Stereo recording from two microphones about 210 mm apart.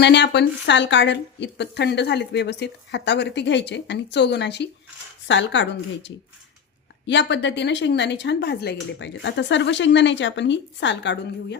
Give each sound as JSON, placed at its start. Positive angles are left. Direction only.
{"t": 0.0, "sound": "a woman's voice", "side_deg": 55}